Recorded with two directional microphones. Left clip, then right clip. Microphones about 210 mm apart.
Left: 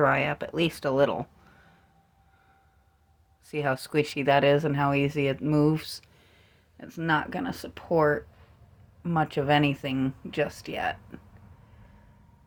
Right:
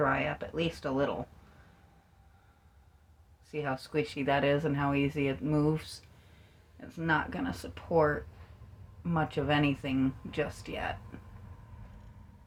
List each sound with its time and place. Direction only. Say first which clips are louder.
0.0 s speech: left 6 dB; 55° left (ahead or behind)
3.4 s speech: left 7 dB; 55° left (ahead or behind)